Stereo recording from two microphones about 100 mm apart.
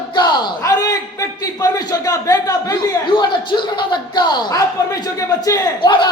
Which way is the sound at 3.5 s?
50° left (ahead or behind).